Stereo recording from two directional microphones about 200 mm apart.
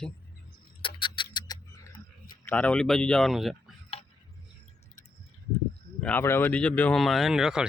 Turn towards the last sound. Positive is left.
turn(degrees=0)  # may be behind; listen again after turning